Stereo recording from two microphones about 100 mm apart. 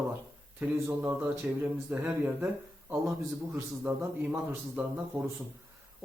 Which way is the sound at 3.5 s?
25° right (ahead or behind).